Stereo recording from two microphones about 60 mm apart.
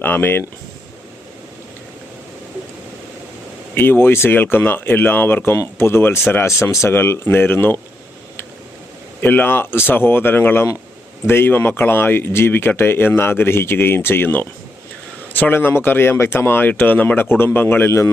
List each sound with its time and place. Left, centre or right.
0.0 s speech: left
3.8 s speech: left
6.6 s speech: left
6.9 s speech: left
9.2 s speech: left